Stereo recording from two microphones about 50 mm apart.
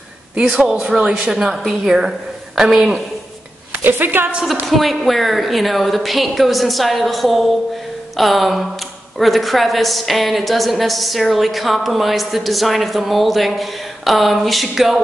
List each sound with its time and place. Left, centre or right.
0.4 s speech: right
3.8 s a woman's voice: right
4.6 s a woman's voice: centre